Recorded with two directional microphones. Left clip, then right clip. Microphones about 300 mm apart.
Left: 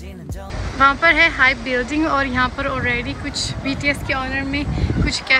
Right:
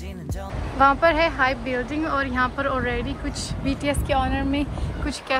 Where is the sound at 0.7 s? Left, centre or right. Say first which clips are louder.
Left 4 dB; centre.